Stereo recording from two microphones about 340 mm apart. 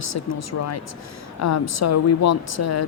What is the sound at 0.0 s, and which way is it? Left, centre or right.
Speech, left.